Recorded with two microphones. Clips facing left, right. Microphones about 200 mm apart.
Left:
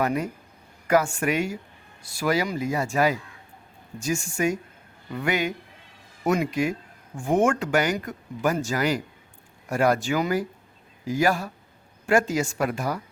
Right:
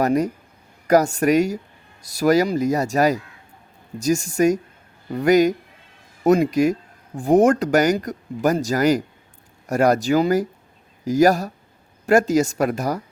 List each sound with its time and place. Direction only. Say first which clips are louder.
0.0 s speech: right 6 dB; 40° right (ahead or behind)